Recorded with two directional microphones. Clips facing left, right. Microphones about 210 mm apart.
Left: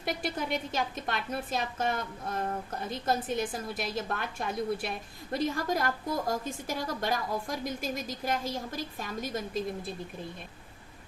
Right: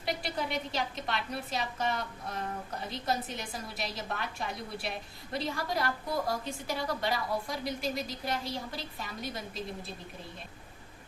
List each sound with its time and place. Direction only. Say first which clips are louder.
0.0 s a woman's voice: left 1 dB; 50° left (ahead or behind)